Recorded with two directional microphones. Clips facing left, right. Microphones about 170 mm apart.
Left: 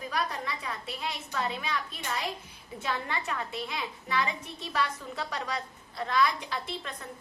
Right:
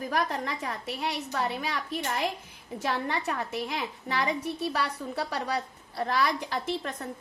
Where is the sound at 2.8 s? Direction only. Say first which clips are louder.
Right 4 dB; 40° right (ahead or behind).